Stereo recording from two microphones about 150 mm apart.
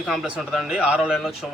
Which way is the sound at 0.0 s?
Centre (ahead or behind).